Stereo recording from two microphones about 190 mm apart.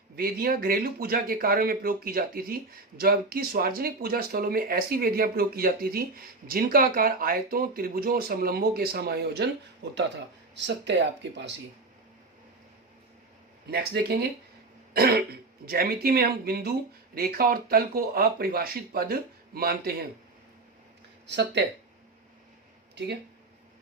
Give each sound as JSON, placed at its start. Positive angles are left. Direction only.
{"t": 0.2, "sound": "speech", "side_deg": -50}
{"t": 10.5, "sound": "speech", "side_deg": -65}
{"t": 13.7, "sound": "speech", "side_deg": -55}
{"t": 21.2, "sound": "speech", "side_deg": -65}